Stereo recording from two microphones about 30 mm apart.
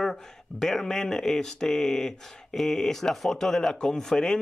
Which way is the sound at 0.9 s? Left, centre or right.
Centre.